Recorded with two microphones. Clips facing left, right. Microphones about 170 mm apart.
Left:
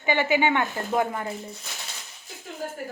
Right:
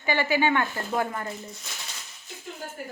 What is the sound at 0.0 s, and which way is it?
A woman's voice, 20° left (ahead or behind).